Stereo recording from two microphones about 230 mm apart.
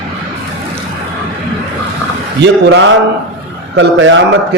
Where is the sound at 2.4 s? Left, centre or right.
Right.